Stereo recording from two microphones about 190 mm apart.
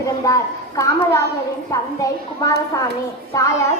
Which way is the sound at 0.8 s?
15° left (ahead or behind).